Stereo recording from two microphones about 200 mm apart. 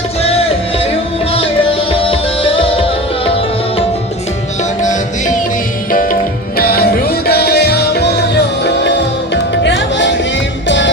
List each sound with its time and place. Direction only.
1.9 s music: 30° left (ahead or behind)
4.8 s music: 40° left (ahead or behind); by 10.9 s 65° left (ahead or behind)